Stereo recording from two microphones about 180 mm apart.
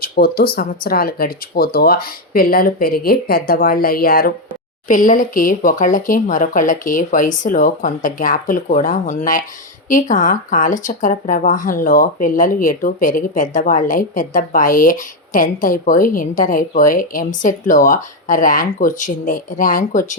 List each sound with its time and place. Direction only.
0.0 s speech: 60° left (ahead or behind)